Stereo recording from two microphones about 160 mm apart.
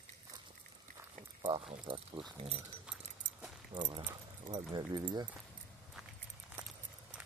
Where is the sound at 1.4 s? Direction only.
35° right (ahead or behind).